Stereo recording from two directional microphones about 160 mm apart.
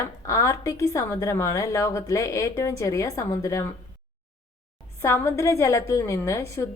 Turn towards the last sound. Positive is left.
turn(degrees=20)  # may be behind; listen again after turning